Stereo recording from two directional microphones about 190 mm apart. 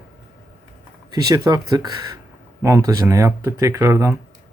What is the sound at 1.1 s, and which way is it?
Speech, 20° right (ahead or behind).